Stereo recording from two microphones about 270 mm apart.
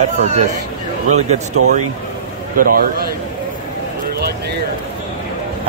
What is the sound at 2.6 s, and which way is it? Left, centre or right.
Speech, right.